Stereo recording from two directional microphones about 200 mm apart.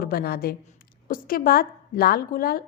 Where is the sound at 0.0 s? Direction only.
50° left (ahead or behind).